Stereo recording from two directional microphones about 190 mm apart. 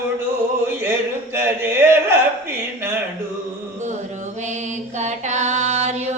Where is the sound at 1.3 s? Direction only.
10° right (ahead or behind).